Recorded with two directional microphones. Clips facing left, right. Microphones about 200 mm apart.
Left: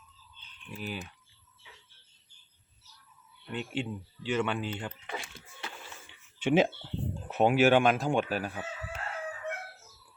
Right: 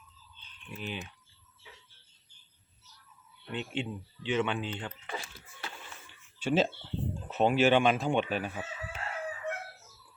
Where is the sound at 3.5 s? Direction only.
Centre (ahead or behind).